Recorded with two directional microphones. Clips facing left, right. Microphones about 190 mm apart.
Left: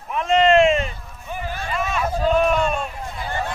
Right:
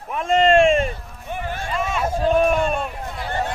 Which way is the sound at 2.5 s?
50° right (ahead or behind).